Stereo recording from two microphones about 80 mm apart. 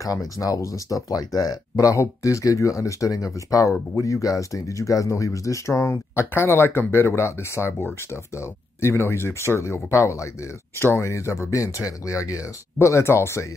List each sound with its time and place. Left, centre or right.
0.0 s speech: left